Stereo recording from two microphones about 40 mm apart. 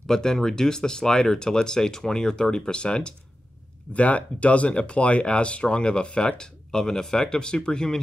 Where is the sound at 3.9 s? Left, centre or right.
Left; by 8.0 s centre.